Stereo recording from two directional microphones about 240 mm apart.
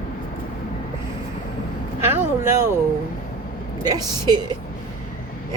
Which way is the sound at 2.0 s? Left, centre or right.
Centre.